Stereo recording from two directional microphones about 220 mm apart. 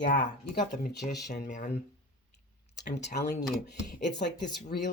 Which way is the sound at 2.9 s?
50° left (ahead or behind).